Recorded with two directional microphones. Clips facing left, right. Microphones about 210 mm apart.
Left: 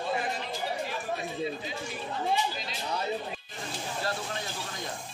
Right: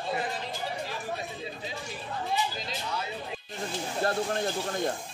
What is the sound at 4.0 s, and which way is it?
Speech, 50° right (ahead or behind).